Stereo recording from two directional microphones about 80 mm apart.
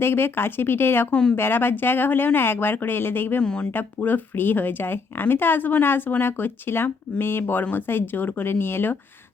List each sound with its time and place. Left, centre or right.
0.0 s speech: left
1.1 s speech: centre
1.4 s speech: left
3.4 s speech: centre
3.7 s speech: left